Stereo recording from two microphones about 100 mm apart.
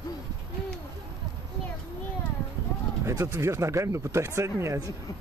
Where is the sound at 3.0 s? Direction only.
30° right (ahead or behind).